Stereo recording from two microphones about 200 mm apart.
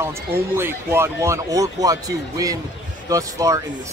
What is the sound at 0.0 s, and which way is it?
Speech, 10° right (ahead or behind).